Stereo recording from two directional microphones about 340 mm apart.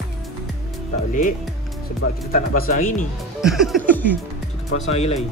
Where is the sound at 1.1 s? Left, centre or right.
Left.